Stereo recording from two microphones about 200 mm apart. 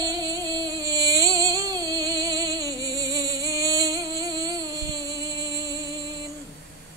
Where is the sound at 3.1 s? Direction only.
20° right (ahead or behind).